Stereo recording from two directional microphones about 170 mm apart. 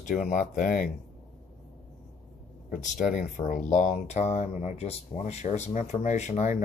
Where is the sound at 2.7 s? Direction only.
50° left (ahead or behind).